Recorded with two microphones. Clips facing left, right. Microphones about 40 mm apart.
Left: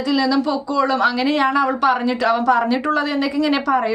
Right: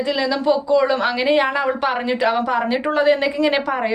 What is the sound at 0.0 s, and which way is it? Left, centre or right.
A woman's voice, right.